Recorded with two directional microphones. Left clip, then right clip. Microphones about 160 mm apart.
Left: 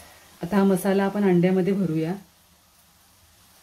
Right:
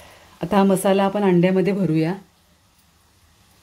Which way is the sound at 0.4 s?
40° right (ahead or behind).